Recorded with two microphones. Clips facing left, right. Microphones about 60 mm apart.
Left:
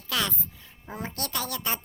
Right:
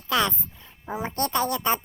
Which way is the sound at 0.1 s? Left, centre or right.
Right.